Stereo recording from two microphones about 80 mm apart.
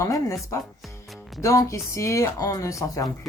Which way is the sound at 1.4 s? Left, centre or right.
Left.